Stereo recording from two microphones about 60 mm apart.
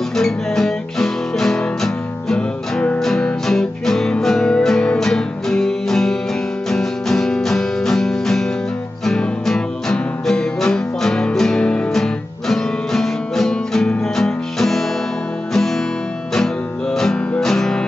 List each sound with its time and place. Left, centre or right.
0.2 s guitar: centre
3.0 s music: centre